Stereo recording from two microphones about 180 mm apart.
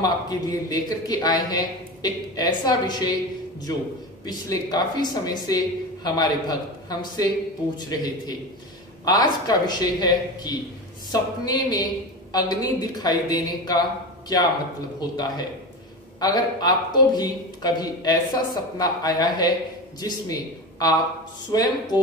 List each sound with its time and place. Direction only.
0.0 s a man's voice: 20° left (ahead or behind)
4.3 s a man's voice: 20° left (ahead or behind)
15.0 s a man's voice: 20° left (ahead or behind)
21.5 s a man's voice: 20° left (ahead or behind)